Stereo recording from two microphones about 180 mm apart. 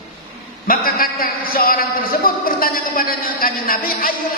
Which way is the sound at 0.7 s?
55° left (ahead or behind).